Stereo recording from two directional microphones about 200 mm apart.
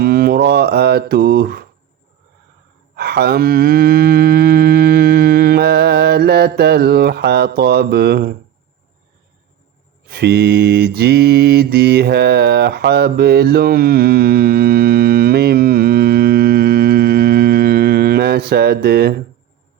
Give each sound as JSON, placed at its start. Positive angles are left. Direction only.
{"t": 0.0, "sound": "music", "side_deg": -50}
{"t": 2.9, "sound": "a sound", "side_deg": -55}
{"t": 10.1, "sound": "mantra", "side_deg": -55}